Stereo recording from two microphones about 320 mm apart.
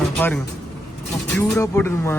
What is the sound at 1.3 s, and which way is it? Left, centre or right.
Speech, centre.